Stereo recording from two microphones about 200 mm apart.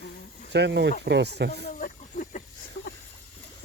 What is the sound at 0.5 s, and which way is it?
Speech, 60° right (ahead or behind).